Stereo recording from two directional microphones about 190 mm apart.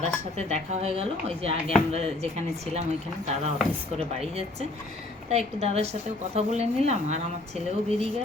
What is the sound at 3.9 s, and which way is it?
A woman's voice, 30° right (ahead or behind).